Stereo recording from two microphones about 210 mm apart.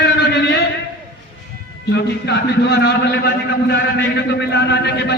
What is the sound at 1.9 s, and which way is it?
A man's voice, 55° left (ahead or behind).